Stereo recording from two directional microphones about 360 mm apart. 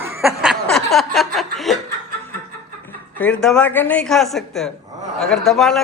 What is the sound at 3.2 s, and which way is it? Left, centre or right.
A man's voice, centre.